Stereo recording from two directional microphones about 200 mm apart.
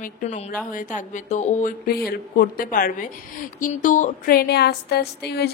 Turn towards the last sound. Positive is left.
turn(degrees=55)  # may be behind; listen again after turning